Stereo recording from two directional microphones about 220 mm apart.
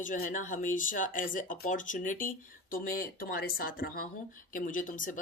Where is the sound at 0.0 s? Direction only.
35° left (ahead or behind).